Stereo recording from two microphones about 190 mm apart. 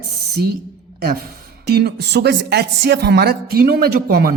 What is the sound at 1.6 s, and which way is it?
A woman's voice, 60° right (ahead or behind).